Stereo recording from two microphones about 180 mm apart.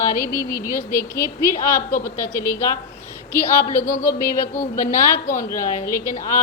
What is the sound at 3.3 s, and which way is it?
A woman's voice, 15° left (ahead or behind).